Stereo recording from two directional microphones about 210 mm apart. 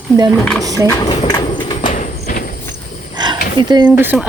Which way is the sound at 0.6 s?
15° right (ahead or behind).